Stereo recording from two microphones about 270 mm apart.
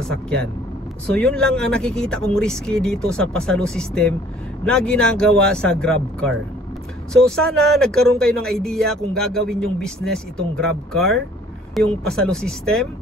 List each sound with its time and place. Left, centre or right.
1.1 s speech: centre